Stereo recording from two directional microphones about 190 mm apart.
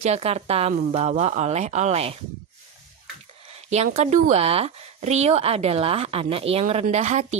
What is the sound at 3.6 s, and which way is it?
Speech, 35° right (ahead or behind).